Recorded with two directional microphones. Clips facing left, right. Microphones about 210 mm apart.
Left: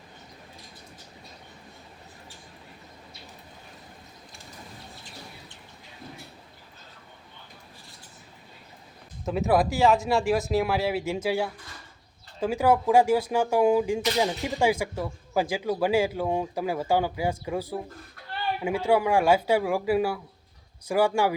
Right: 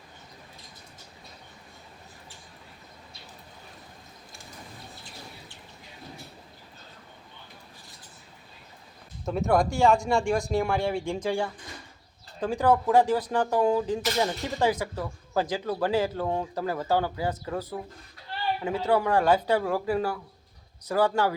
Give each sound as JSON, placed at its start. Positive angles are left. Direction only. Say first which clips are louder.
{"t": 9.2, "sound": "speech", "louder": "left 1 dB", "side_deg": 5}